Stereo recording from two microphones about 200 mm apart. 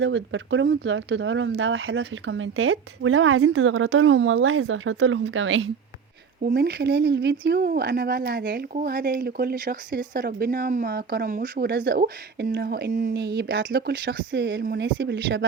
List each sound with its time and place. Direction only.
0.0 s speech: 70° right (ahead or behind)
6.4 s speech: 55° right (ahead or behind)